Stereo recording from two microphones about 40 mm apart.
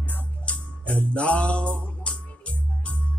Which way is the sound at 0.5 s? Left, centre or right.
Left.